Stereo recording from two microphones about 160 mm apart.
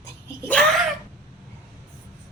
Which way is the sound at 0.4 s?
5° left (ahead or behind).